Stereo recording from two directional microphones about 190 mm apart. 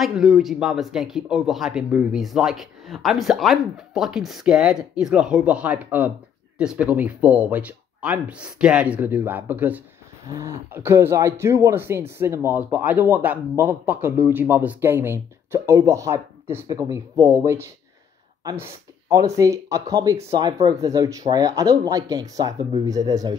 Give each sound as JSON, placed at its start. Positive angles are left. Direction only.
{"t": 0.0, "sound": "a man's voice", "side_deg": 0}